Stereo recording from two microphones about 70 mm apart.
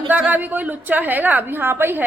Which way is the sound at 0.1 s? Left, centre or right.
Right.